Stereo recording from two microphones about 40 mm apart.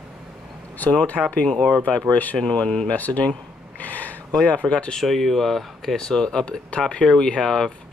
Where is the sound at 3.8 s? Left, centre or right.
Left.